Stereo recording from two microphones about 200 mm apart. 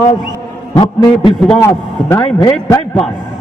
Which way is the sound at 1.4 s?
10° left (ahead or behind).